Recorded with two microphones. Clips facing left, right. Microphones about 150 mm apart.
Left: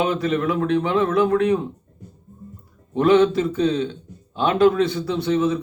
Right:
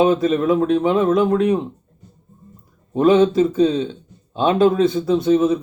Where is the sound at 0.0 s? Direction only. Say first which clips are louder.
Right 5 dB; 25° right (ahead or behind).